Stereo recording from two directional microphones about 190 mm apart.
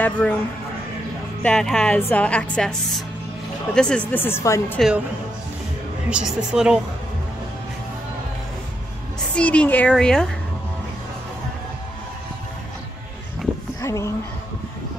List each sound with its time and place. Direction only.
0.0 s a woman's voice: 10° left (ahead or behind)
1.4 s a woman's voice: 5° left (ahead or behind)
4.7 s a woman's voice: centre (ahead or behind)
6.0 s a woman's voice: 5° right (ahead or behind)
9.3 s a woman's voice: 5° left (ahead or behind)
13.7 s speech: 15° left (ahead or behind)